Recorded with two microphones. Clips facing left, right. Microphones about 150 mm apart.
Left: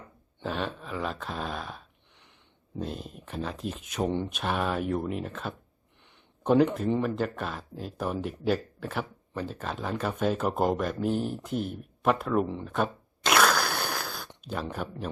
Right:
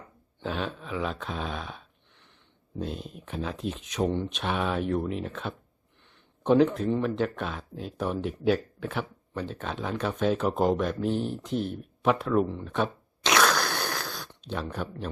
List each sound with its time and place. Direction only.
0.4 s speech: centre (ahead or behind)
4.1 s speech: 15° left (ahead or behind)
4.4 s speech: centre (ahead or behind)
12.6 s a sound: 5° left (ahead or behind)
14.4 s speech: 5° left (ahead or behind)